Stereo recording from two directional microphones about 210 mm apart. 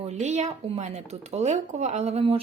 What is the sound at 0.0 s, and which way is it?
Speech, 30° right (ahead or behind).